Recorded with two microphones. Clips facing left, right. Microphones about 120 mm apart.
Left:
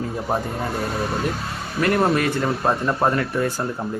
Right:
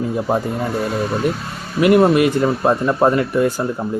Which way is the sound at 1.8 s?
15° right (ahead or behind).